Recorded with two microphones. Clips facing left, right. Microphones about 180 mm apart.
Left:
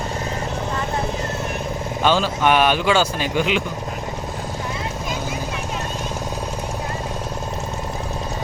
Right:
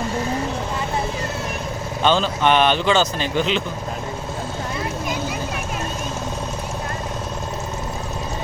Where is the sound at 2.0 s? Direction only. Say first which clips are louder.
Even; 5° left (ahead or behind).